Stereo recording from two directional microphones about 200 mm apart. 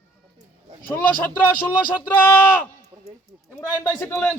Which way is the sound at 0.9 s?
10° left (ahead or behind).